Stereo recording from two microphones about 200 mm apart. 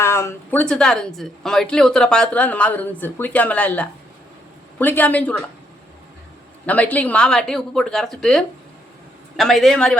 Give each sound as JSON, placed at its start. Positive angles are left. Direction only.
{"t": 0.0, "sound": "a woman's voice", "side_deg": 15}
{"t": 6.7, "sound": "a woman's voice", "side_deg": 10}